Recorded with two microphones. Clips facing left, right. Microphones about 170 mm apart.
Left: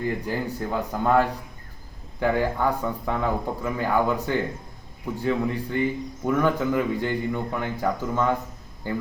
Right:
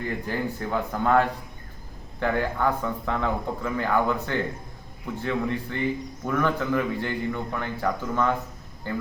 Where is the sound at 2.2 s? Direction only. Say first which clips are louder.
Left 2 dB; 10° left (ahead or behind).